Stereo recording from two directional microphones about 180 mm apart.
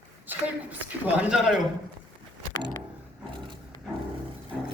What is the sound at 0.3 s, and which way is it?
A woman's voice, 10° right (ahead or behind).